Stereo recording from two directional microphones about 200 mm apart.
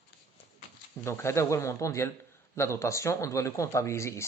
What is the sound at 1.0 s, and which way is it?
Speech, 15° left (ahead or behind).